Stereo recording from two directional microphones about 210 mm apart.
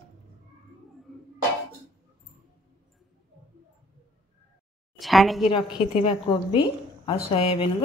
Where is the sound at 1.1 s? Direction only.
Centre (ahead or behind).